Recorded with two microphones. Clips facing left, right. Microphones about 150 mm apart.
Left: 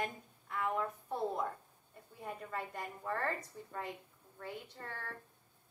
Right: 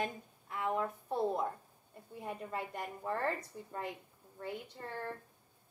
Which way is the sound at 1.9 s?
20° right (ahead or behind).